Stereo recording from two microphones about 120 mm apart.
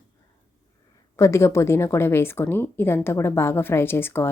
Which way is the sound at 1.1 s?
25° left (ahead or behind).